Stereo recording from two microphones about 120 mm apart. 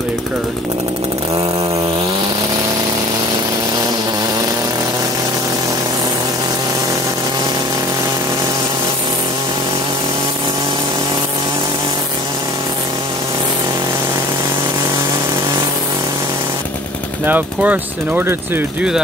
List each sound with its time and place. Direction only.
17.3 s speech: 15° right (ahead or behind)